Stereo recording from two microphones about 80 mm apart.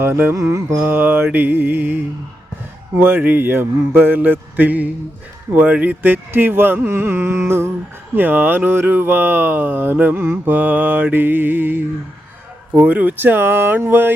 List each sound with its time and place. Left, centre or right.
0.0 s speech: right
0.4 s carnatic music: right
0.9 s speech: right
3.0 s speech: right